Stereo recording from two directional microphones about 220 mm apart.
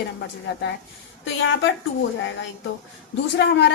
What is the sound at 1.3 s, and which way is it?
Speech, 60° left (ahead or behind).